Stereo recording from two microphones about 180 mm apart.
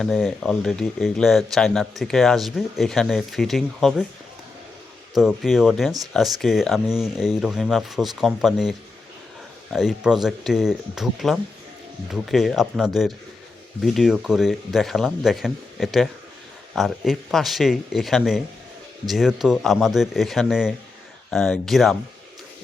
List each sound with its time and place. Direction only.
0.0 s speech: centre (ahead or behind)
5.1 s speech: centre (ahead or behind)
9.7 s speech: 5° right (ahead or behind)